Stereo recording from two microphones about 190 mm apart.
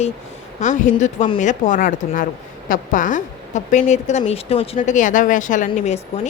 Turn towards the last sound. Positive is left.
turn(degrees=40)  # may be behind; listen again after turning